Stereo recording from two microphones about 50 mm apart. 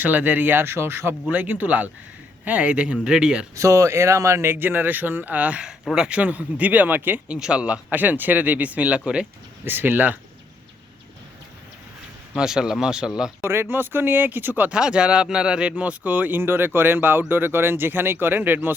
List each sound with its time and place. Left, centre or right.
0.0 s speech: right
1.3 s speech: right; by 3.4 s centre
3.5 s speech: right
4.5 s speech: right
7.3 s speech: centre
7.6 s speech: right
9.6 s speech: right
12.4 s speech: centre
13.4 s speech: right
14.7 s speech: centre; by 18.7 s right